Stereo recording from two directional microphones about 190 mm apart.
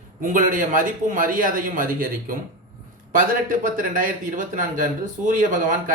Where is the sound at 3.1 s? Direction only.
45° right (ahead or behind).